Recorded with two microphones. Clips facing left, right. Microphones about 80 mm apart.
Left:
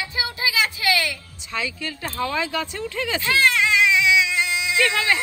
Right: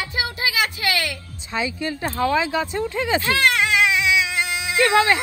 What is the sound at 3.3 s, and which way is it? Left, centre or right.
Baby cry, right.